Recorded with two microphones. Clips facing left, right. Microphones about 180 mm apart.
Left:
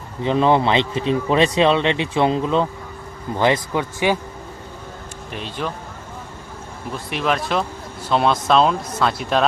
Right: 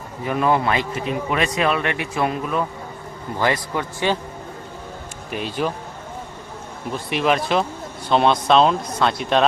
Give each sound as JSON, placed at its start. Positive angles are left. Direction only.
{"t": 0.2, "sound": "a man's voice", "side_deg": 25}
{"t": 5.3, "sound": "speech", "side_deg": -10}
{"t": 6.9, "sound": "speech", "side_deg": 0}